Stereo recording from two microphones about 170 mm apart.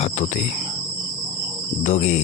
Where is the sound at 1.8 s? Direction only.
45° left (ahead or behind).